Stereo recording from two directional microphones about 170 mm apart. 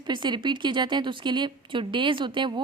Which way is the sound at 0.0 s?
25° right (ahead or behind).